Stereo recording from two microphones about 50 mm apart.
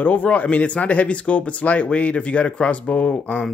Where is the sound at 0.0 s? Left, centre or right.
Left.